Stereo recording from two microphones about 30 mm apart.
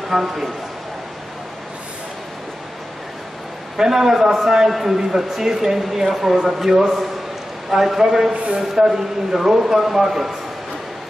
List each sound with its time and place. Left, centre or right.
0.1 s speech: centre
3.7 s speech: centre